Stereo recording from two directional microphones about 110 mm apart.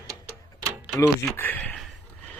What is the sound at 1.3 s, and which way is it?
Speech, 15° left (ahead or behind).